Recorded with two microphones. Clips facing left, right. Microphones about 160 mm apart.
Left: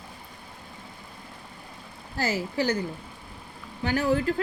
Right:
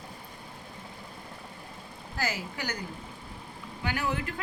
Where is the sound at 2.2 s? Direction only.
35° left (ahead or behind).